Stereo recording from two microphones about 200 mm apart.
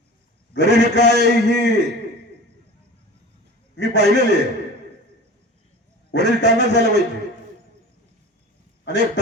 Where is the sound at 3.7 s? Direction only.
60° left (ahead or behind).